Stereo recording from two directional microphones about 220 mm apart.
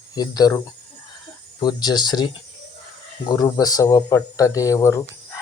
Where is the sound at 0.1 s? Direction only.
15° left (ahead or behind).